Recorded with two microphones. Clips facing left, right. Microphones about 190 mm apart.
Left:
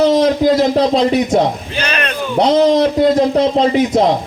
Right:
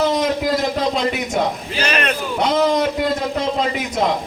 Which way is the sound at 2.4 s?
35° left (ahead or behind).